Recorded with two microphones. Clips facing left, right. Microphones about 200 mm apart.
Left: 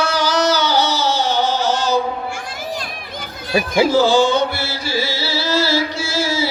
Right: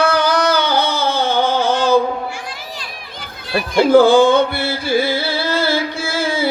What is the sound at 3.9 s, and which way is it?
Music, 55° right (ahead or behind).